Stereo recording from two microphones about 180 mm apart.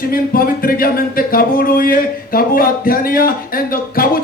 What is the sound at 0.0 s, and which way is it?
Speech, 55° left (ahead or behind).